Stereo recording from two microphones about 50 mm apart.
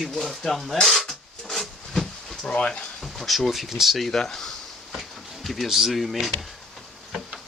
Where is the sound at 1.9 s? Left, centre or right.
Centre.